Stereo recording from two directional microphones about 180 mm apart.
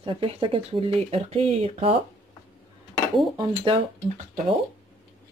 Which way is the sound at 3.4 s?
25° right (ahead or behind).